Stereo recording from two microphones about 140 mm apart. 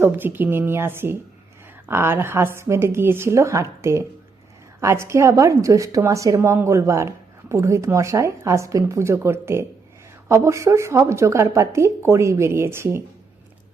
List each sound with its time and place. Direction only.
0.0 s a woman's voice: 15° right (ahead or behind)